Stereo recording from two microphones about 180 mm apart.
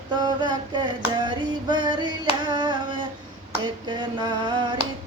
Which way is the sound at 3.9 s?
25° right (ahead or behind).